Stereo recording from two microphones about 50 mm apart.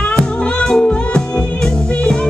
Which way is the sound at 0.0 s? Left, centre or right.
Left.